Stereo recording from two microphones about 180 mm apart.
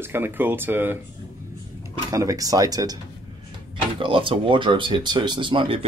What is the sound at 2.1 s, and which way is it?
Speech, 20° right (ahead or behind).